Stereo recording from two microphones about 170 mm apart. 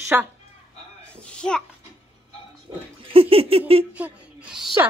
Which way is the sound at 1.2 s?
5° left (ahead or behind).